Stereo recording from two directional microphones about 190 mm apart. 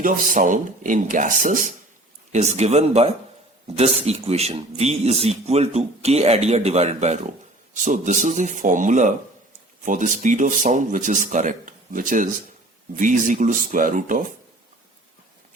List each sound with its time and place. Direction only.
0.0 s speech: 45° right (ahead or behind)